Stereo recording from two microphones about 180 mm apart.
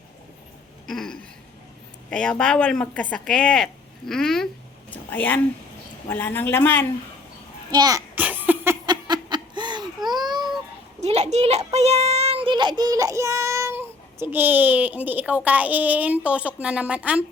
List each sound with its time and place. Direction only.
0.9 s a woman's voice: 5° left (ahead or behind)
7.7 s giggle: 20° right (ahead or behind)
11.0 s a child's voice: 35° right (ahead or behind); by 17.2 s 5° right (ahead or behind)